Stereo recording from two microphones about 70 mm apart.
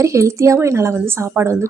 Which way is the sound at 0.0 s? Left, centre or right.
Right.